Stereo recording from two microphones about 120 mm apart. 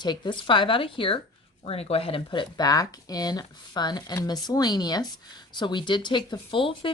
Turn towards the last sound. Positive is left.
turn(degrees=45)  # may be behind; listen again after turning